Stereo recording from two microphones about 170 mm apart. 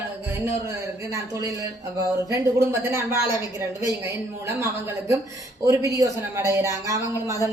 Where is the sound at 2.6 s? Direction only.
15° right (ahead or behind).